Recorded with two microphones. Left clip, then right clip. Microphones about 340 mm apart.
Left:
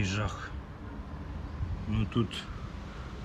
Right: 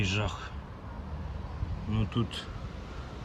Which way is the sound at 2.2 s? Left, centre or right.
Centre.